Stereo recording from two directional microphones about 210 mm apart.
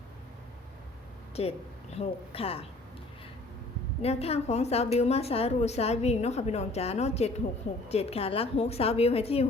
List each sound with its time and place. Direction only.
1.4 s a woman's voice: 30° left (ahead or behind)
4.0 s a woman's voice: 30° left (ahead or behind)